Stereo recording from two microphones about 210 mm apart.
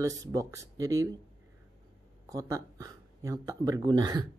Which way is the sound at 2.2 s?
15° right (ahead or behind).